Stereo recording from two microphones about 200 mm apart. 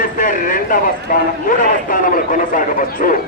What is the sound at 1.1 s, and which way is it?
A man's voice, 45° left (ahead or behind).